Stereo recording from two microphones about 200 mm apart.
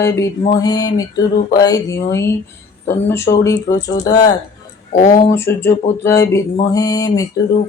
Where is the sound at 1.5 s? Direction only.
15° left (ahead or behind).